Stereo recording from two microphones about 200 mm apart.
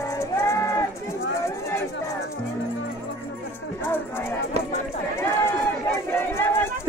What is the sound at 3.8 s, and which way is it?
Music, 10° left (ahead or behind).